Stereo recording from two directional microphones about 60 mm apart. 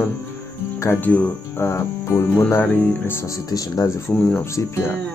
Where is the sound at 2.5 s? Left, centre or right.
Left.